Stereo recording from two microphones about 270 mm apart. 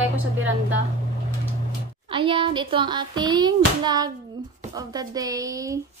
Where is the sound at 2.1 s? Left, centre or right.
Centre.